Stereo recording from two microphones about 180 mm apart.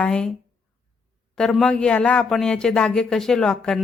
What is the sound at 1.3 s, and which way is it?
Speech, 5° left (ahead or behind).